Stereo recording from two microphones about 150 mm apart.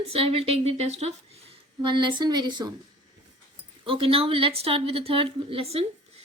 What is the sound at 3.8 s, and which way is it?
Speech, 35° right (ahead or behind).